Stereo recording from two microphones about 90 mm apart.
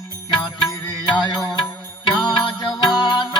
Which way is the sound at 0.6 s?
55° left (ahead or behind).